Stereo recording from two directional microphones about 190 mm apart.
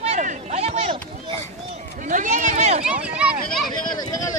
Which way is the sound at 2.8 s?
5° right (ahead or behind).